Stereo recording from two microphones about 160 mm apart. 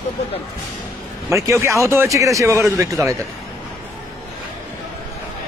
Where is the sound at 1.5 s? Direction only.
20° right (ahead or behind).